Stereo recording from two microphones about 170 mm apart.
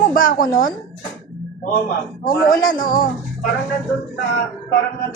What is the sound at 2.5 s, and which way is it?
Speech, 55° left (ahead or behind).